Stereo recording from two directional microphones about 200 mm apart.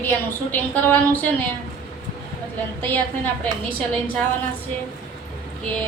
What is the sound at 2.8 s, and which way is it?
Speech, 10° left (ahead or behind).